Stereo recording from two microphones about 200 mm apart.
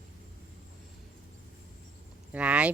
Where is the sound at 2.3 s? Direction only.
5° right (ahead or behind).